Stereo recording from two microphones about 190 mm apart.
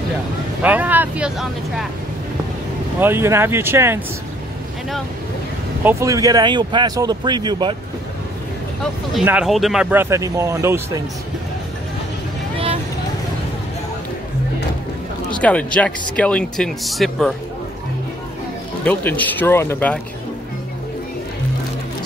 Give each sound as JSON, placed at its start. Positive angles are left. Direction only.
{"t": 0.6, "sound": "speech", "side_deg": -10}
{"t": 3.0, "sound": "speech", "side_deg": -10}
{"t": 5.9, "sound": "speech", "side_deg": -15}
{"t": 9.1, "sound": "speech", "side_deg": -5}
{"t": 15.4, "sound": "speech", "side_deg": 5}
{"t": 18.9, "sound": "speech", "side_deg": 10}